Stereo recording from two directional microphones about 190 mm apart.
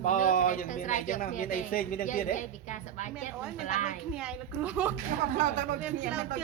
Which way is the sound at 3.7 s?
40° left (ahead or behind).